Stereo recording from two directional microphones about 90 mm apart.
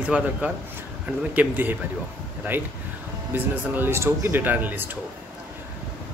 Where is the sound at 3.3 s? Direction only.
20° right (ahead or behind).